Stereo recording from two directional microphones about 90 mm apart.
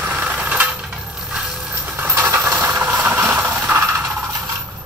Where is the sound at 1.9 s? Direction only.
25° right (ahead or behind).